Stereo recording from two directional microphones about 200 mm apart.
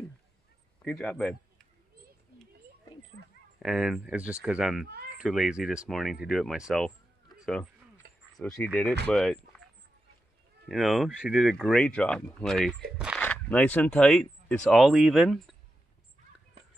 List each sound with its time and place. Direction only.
0.8 s speech: 5° left (ahead or behind)
3.5 s speech: centre (ahead or behind)
7.3 s a sound: centre (ahead or behind)
8.0 s a sound: 55° right (ahead or behind)
8.4 s speech: centre (ahead or behind)
10.7 s speech: centre (ahead or behind)
13.2 s speech: 10° left (ahead or behind)